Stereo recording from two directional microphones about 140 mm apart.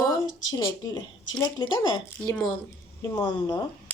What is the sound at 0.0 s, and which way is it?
A woman's voice, 25° left (ahead or behind).